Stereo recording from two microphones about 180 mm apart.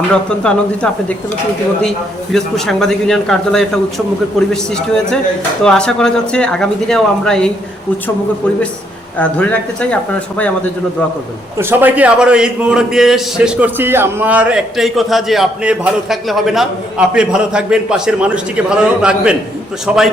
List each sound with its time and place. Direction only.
0.1 s a man's voice: 5° left (ahead or behind)
2.3 s a man's voice: 5° left (ahead or behind)
5.6 s a man's voice: 5° left (ahead or behind)
9.1 s speech: 5° left (ahead or behind)
11.5 s a man's voice: 10° right (ahead or behind)